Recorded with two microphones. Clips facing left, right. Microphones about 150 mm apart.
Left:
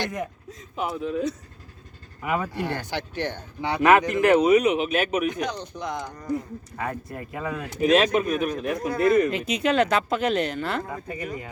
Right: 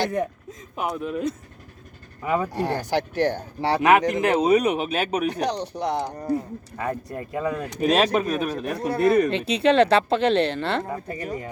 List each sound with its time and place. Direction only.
0.0 s speech: 30° right (ahead or behind)
0.8 s a man's voice: 55° right (ahead or behind)
2.2 s speech: 35° right (ahead or behind)
3.9 s speech: 20° right (ahead or behind); by 11.4 s 40° right (ahead or behind)